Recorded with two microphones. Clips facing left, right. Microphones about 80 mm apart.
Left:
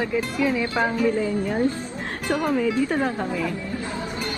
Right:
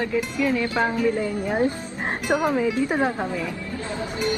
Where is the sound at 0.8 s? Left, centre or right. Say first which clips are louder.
Left 2 dB; centre.